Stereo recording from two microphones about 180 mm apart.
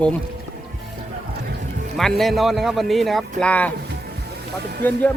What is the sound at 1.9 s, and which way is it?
A man's voice, centre (ahead or behind).